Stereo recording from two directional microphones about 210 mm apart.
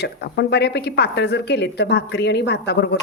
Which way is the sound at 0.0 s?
50° left (ahead or behind).